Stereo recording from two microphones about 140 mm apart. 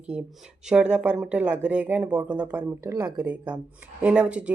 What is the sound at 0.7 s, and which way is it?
Speech, 10° right (ahead or behind).